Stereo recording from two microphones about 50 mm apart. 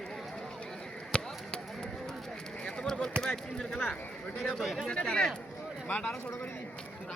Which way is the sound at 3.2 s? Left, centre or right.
Centre.